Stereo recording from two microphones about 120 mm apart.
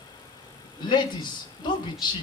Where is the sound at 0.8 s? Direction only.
40° left (ahead or behind).